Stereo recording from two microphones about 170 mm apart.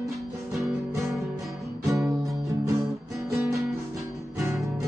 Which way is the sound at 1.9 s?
20° right (ahead or behind).